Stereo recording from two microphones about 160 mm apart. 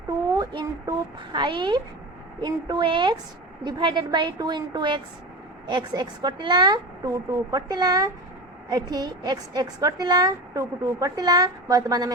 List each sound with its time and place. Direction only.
0.3 s a woman's voice: 25° right (ahead or behind)